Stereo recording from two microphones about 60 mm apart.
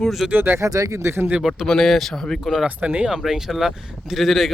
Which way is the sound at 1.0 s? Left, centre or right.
Right.